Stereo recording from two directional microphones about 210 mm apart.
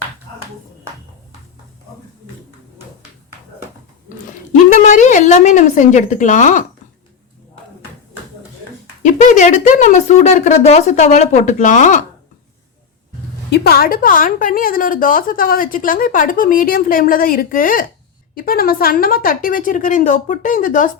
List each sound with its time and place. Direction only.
4.7 s a woman's voice: 35° left (ahead or behind)
9.0 s a woman's voice: 35° left (ahead or behind)
13.5 s a woman's voice: 45° left (ahead or behind)